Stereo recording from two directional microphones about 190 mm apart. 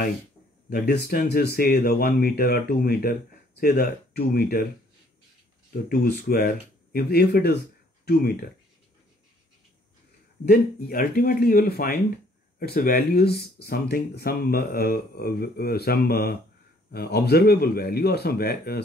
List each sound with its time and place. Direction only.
0.7 s speech: 55° left (ahead or behind)
5.7 s speech: 55° left (ahead or behind)
10.4 s speech: 50° left (ahead or behind)